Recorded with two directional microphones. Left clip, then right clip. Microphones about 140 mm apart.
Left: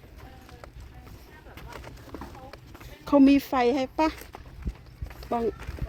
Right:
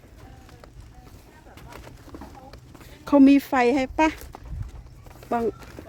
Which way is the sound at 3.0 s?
25° right (ahead or behind).